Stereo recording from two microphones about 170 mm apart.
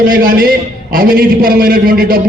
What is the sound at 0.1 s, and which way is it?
A man's voice, 55° right (ahead or behind).